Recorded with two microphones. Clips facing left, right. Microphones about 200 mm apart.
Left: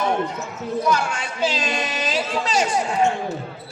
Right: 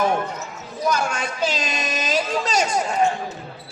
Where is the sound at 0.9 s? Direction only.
40° right (ahead or behind).